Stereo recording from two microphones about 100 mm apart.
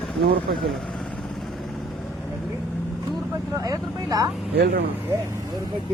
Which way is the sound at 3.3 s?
35° right (ahead or behind).